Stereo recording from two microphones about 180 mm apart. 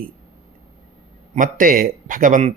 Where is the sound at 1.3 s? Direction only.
50° right (ahead or behind).